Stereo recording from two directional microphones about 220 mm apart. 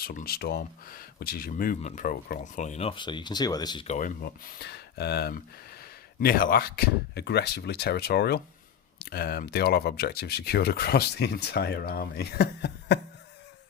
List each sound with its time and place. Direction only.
0.0 s speech: 40° left (ahead or behind); by 3.8 s 20° left (ahead or behind)
3.8 s speech: 35° left (ahead or behind)